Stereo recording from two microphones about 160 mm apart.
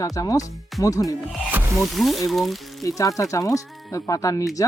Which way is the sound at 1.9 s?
Centre (ahead or behind).